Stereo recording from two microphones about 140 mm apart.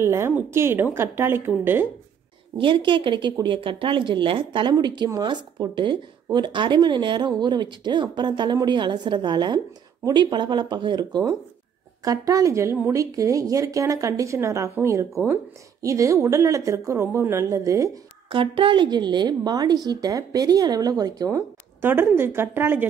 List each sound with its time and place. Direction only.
0.0 s a woman's voice: 20° right (ahead or behind)
2.5 s a woman's voice: 35° right (ahead or behind)
18.3 s a woman's voice: 40° right (ahead or behind); by 22.8 s 15° right (ahead or behind)